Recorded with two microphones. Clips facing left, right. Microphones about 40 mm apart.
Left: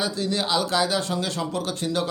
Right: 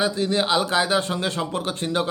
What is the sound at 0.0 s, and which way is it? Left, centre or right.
A man's voice, right.